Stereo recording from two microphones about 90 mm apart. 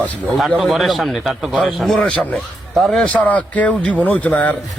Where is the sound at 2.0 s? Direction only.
15° left (ahead or behind).